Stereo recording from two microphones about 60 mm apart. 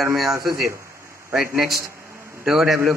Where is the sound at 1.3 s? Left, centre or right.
Centre.